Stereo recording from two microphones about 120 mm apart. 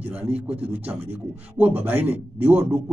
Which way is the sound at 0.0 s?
10° right (ahead or behind).